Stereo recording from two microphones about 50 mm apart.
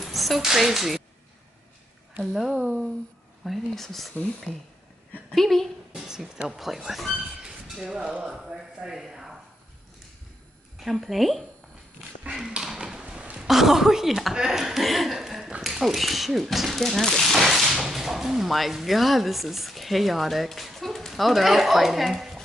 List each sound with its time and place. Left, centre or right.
0.0 s a sound: centre
0.4 s speech: centre
2.3 s speech: centre
4.5 s speech: left
5.3 s speech: centre
5.9 s speech: centre
10.8 s speech: centre
12.4 s tap: centre
13.4 s speech: centre